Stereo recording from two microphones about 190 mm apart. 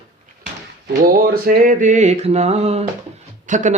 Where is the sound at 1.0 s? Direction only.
50° right (ahead or behind).